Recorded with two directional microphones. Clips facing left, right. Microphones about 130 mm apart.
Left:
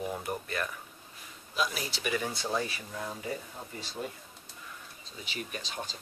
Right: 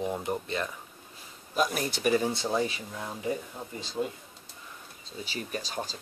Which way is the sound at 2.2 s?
25° right (ahead or behind).